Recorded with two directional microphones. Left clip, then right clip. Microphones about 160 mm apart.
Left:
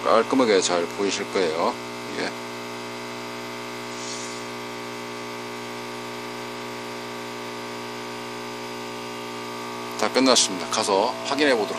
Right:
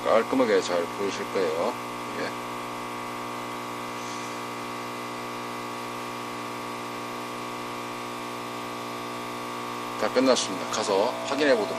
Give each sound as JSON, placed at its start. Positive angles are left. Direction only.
{"t": 0.1, "sound": "speech", "side_deg": 50}
{"t": 10.0, "sound": "speech", "side_deg": 50}